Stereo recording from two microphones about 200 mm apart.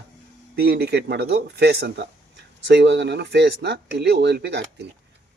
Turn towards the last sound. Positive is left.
turn(degrees=-55)  # may be behind; listen again after turning